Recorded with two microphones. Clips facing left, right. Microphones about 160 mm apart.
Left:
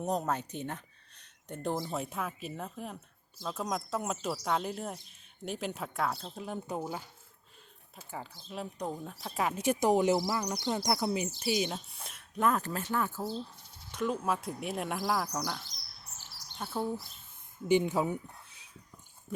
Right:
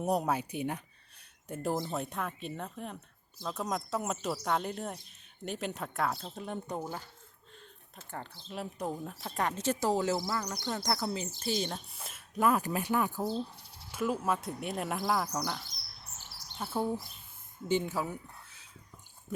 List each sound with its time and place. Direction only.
0.0 s speech: 10° right (ahead or behind); by 11.8 s 10° left (ahead or behind)
11.9 s speech: centre (ahead or behind)
13.9 s speech: 5° right (ahead or behind)
17.7 s speech: 15° left (ahead or behind)